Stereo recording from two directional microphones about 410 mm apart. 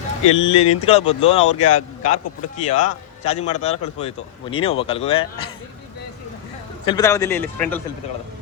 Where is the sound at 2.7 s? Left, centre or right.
Centre.